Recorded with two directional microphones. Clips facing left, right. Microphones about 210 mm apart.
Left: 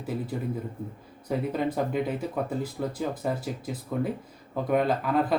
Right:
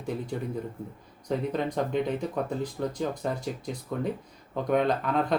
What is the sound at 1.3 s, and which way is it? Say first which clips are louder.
Speech: left 1 dB; 5° left (ahead or behind).